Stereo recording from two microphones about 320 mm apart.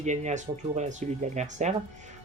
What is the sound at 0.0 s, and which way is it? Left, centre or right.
Speech, right.